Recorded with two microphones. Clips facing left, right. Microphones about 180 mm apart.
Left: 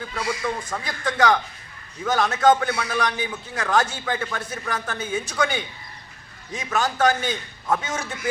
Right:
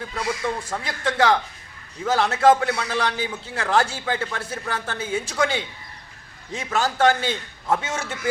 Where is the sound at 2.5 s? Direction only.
Centre (ahead or behind).